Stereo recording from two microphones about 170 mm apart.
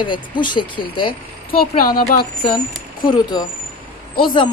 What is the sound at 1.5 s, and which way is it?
Speech, 60° left (ahead or behind).